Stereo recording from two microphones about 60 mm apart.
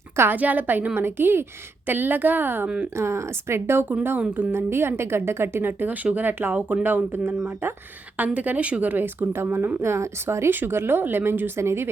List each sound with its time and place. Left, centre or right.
0.3 s a woman's voice: right
0.9 s speech: right
2.6 s speech: centre
2.9 s a woman's voice: right
9.3 s speech: right
10.5 s speech: right